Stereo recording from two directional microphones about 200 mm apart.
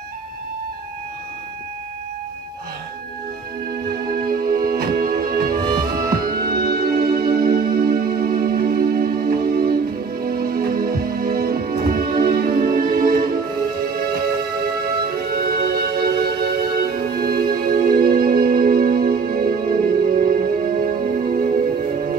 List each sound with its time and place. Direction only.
4.1 s music: 45° right (ahead or behind)
15.3 s music: 45° right (ahead or behind)